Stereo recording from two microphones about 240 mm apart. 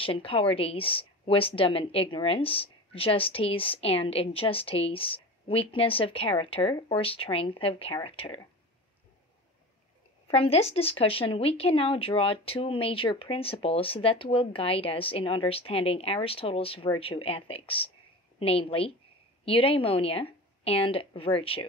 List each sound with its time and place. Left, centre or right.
0.0 s a woman's voice: left
10.2 s a woman's voice: left